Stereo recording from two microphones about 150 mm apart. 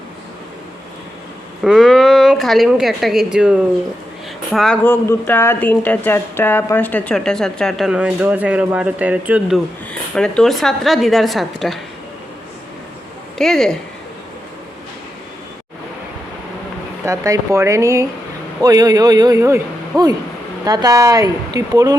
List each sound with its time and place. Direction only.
1.6 s a woman's voice: centre (ahead or behind)
4.8 s speech: 15° left (ahead or behind); by 9.6 s 10° right (ahead or behind)
10.2 s a woman's voice: 5° left (ahead or behind)
13.4 s a woman's voice: centre (ahead or behind)
17.1 s a man's voice: 20° right (ahead or behind)